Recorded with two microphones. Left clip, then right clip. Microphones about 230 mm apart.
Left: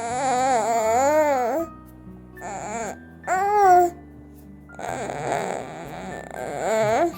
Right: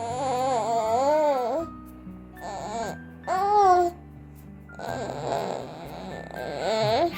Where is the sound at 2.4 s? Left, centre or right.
Left.